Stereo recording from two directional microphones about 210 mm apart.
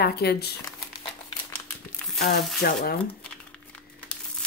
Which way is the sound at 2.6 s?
45° left (ahead or behind).